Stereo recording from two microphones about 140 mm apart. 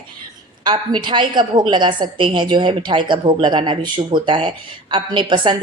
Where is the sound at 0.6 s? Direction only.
30° right (ahead or behind).